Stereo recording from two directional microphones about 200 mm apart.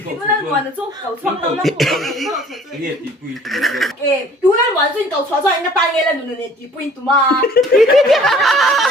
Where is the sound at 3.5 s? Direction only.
Centre (ahead or behind).